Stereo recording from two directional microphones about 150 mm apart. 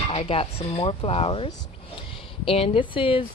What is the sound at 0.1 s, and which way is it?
Speech, 40° left (ahead or behind).